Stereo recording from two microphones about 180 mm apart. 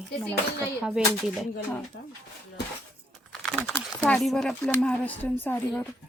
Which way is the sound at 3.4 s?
Centre (ahead or behind).